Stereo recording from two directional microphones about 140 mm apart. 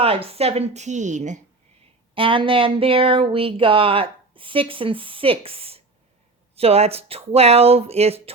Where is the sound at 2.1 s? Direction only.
40° right (ahead or behind).